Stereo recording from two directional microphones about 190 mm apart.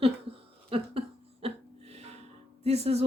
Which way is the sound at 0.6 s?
30° right (ahead or behind).